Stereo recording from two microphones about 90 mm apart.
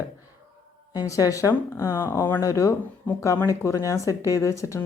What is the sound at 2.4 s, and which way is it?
Speech, 35° left (ahead or behind).